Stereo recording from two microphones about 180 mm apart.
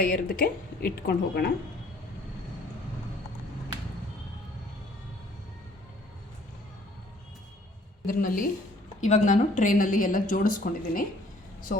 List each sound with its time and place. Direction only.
0.0 s speech: 55° left (ahead or behind)
8.0 s a woman's voice: 50° left (ahead or behind)